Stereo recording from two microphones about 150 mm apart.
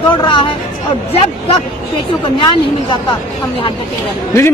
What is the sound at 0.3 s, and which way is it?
Speech, 35° left (ahead or behind).